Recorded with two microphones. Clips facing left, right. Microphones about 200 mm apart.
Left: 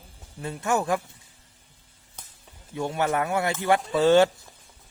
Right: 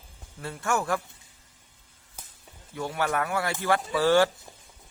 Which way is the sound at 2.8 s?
20° left (ahead or behind).